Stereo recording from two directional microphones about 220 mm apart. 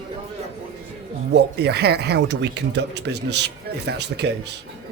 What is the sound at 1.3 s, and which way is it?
Speech, 50° right (ahead or behind).